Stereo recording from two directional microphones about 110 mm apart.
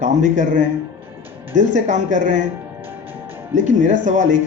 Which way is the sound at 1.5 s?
90° right.